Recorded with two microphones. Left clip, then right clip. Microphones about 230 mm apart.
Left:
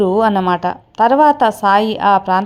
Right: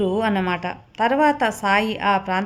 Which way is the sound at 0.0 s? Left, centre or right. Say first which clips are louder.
Left 8 dB; centre.